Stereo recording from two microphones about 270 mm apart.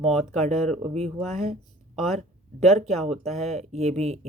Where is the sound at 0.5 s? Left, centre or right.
Centre.